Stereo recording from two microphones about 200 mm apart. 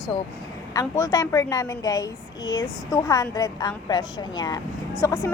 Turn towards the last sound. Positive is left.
turn(degrees=10)  # may be behind; listen again after turning